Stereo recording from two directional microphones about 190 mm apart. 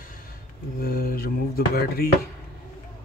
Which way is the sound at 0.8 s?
50° left (ahead or behind).